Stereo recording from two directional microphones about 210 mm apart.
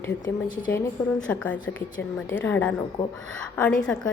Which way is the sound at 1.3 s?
5° left (ahead or behind).